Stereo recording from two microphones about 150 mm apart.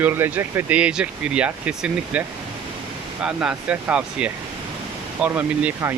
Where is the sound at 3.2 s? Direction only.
5° right (ahead or behind).